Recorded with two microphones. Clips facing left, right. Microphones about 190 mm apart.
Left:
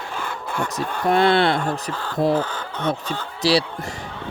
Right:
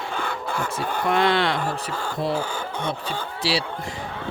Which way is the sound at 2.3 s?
10° right (ahead or behind).